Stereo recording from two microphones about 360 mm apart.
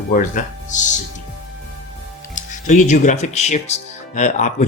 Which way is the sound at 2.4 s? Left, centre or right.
Left.